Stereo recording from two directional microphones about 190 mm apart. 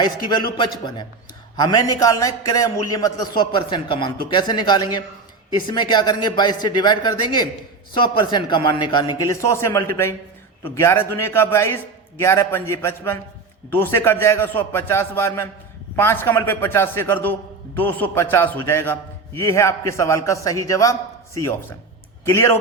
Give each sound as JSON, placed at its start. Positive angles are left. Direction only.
{"t": 0.0, "sound": "a man's voice", "side_deg": 20}